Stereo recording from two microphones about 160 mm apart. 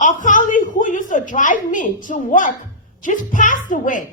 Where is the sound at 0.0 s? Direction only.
55° left (ahead or behind).